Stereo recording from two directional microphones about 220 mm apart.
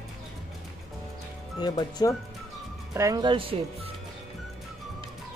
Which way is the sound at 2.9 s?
15° right (ahead or behind).